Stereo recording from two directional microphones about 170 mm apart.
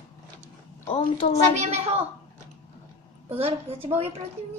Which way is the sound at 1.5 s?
40° right (ahead or behind).